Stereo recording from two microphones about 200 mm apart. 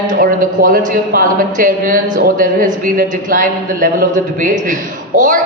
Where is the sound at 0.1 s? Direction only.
45° right (ahead or behind).